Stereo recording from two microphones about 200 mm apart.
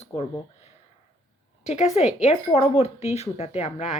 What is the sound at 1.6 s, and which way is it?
Speech, 35° left (ahead or behind).